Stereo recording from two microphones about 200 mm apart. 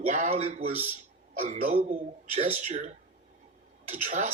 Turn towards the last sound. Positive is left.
turn(degrees=-35)  # may be behind; listen again after turning